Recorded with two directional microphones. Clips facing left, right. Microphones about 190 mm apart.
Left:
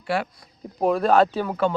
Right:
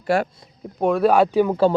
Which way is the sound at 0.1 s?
45° right (ahead or behind).